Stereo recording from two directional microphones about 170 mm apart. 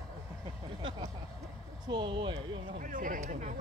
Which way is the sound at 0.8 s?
30° right (ahead or behind).